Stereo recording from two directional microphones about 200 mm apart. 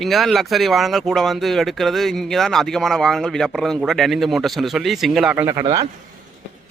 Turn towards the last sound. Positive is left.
turn(degrees=-15)  # may be behind; listen again after turning